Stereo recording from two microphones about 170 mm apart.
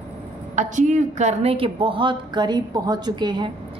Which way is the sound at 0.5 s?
45° right (ahead or behind).